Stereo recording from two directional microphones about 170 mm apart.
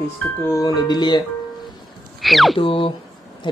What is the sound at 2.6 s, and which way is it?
Speech, 30° left (ahead or behind).